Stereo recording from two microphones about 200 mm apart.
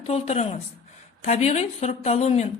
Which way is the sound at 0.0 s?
30° left (ahead or behind).